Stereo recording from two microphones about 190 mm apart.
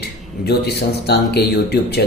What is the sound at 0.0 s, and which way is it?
A man's voice, 60° left (ahead or behind).